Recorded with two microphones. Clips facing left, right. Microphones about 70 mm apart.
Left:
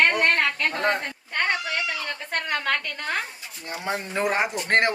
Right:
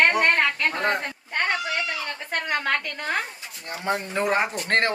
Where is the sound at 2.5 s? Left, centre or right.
Centre.